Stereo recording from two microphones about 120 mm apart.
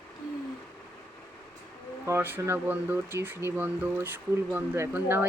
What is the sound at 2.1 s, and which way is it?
Speech, 20° right (ahead or behind).